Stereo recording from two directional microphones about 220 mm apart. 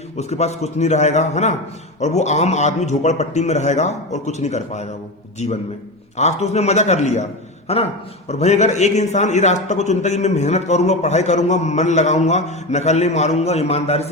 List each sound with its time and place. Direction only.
0.2 s a man's voice: 30° left (ahead or behind)